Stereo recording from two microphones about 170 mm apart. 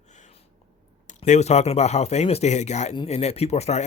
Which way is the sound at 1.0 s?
45° left (ahead or behind).